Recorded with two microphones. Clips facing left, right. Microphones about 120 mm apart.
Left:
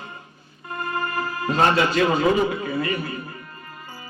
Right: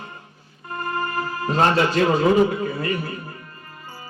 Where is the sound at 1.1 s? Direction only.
35° right (ahead or behind).